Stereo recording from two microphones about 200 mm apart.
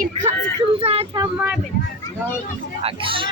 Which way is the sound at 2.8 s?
25° right (ahead or behind).